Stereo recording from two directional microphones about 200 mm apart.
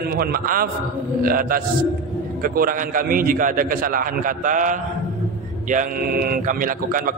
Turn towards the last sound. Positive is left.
turn(degrees=-45)  # may be behind; listen again after turning